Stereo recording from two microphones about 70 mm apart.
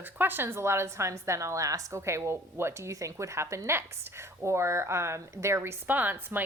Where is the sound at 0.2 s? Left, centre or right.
Right.